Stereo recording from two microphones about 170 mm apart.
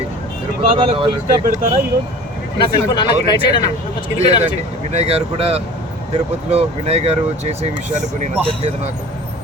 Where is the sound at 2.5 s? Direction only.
25° left (ahead or behind).